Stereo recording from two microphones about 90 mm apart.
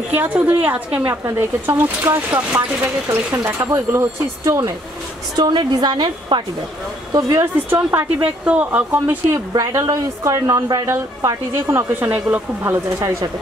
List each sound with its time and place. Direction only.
0.1 s speech: 20° right (ahead or behind)
1.2 s a woman's voice: 30° right (ahead or behind)
5.4 s a woman's voice: 50° right (ahead or behind)
7.1 s a woman's voice: 45° right (ahead or behind)
7.7 s speech: 25° right (ahead or behind)
9.8 s a woman's voice: 40° right (ahead or behind)
11.7 s speech: 20° right (ahead or behind)
13.0 s a woman's voice: 35° right (ahead or behind)